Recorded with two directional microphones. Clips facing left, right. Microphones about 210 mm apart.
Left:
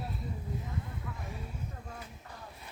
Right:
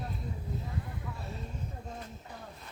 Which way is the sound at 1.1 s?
15° left (ahead or behind).